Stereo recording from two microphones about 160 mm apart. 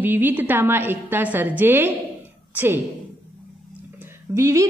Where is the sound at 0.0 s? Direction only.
10° right (ahead or behind).